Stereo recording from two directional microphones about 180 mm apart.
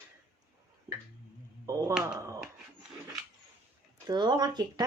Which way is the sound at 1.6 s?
15° right (ahead or behind).